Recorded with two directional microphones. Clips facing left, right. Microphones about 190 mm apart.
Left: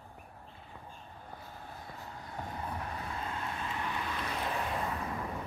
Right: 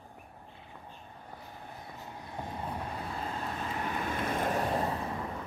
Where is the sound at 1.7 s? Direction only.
20° right (ahead or behind); by 5.0 s 35° right (ahead or behind).